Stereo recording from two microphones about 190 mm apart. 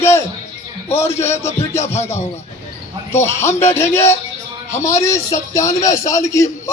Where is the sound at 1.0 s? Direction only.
15° left (ahead or behind).